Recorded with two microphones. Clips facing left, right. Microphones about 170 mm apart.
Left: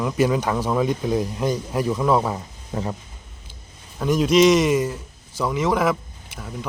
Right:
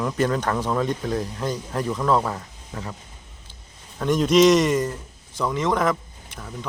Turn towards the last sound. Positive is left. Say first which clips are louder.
# left 2 dB
turn(degrees=5)  # may be behind; listen again after turning